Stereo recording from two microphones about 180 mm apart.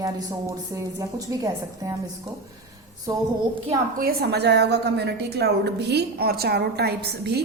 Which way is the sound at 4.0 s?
60° right (ahead or behind).